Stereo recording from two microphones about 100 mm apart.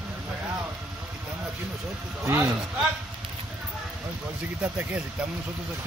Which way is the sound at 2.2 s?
30° right (ahead or behind).